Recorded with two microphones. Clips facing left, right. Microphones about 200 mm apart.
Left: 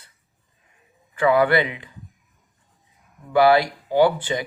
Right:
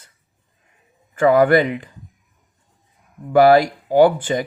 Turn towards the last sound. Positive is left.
turn(degrees=-45)  # may be behind; listen again after turning